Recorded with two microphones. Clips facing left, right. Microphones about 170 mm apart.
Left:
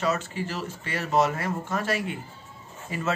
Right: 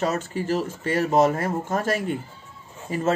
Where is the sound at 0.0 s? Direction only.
45° right (ahead or behind).